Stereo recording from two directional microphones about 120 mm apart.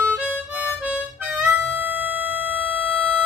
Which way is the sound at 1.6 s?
15° right (ahead or behind).